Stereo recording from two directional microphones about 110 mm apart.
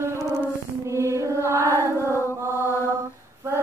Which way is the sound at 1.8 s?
25° left (ahead or behind).